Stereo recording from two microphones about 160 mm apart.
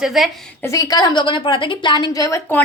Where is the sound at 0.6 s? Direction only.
20° left (ahead or behind).